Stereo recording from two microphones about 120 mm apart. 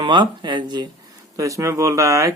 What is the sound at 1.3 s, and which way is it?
Speech, 25° right (ahead or behind).